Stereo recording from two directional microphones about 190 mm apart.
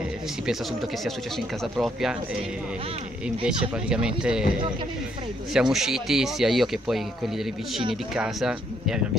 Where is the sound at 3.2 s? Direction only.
5° right (ahead or behind).